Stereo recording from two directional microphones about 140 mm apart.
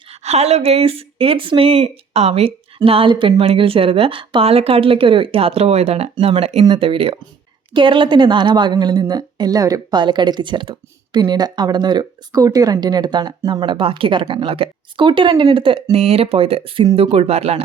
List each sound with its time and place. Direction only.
0.1 s a woman's voice: 50° right (ahead or behind)